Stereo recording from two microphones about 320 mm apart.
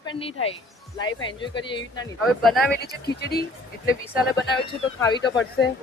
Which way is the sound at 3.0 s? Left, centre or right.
Left.